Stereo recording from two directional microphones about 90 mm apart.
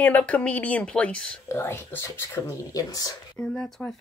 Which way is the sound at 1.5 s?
30° left (ahead or behind).